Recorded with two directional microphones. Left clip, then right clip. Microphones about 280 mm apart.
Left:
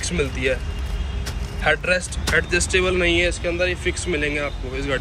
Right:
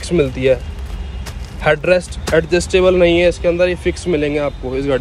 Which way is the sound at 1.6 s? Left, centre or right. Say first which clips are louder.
Right 6 dB; centre.